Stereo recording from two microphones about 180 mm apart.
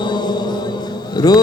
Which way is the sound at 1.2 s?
20° left (ahead or behind).